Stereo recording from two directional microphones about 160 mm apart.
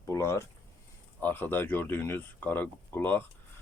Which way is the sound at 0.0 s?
15° left (ahead or behind).